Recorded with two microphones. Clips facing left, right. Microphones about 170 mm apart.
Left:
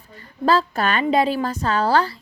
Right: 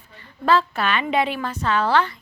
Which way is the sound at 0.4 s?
40° left (ahead or behind).